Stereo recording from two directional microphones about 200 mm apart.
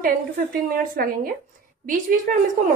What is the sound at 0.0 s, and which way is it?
A woman's voice, 45° right (ahead or behind).